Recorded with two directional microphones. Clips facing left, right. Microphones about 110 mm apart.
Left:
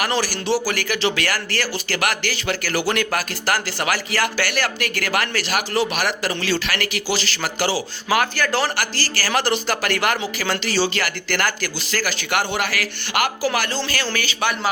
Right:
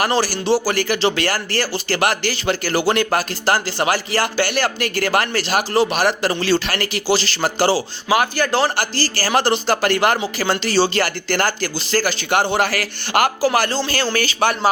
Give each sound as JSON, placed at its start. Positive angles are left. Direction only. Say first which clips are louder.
{"t": 0.0, "sound": "speech", "louder": "right 4 dB", "side_deg": -30}
{"t": 8.1, "sound": "speech", "louder": "right 3 dB", "side_deg": -20}